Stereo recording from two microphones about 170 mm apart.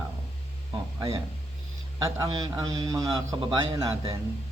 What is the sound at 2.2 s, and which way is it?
Speech, 20° right (ahead or behind).